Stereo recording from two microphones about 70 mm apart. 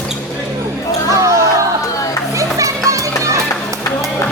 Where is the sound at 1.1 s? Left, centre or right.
Right.